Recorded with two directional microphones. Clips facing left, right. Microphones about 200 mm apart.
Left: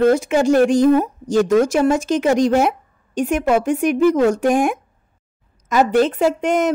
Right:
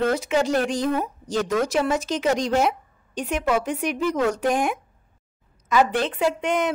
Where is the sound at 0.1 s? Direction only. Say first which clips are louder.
Left 7 dB; 50° left (ahead or behind).